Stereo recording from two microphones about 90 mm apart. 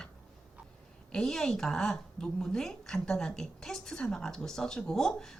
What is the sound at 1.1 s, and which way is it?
A woman's voice, 5° left (ahead or behind).